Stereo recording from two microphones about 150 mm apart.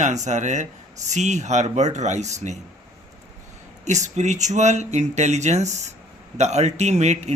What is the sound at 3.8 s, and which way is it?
Speech, 50° right (ahead or behind).